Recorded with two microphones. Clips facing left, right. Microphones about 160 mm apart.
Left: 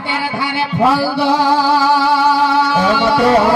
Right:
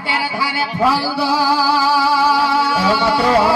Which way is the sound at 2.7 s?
20° left (ahead or behind).